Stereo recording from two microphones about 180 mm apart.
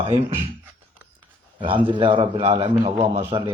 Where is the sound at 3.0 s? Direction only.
35° right (ahead or behind).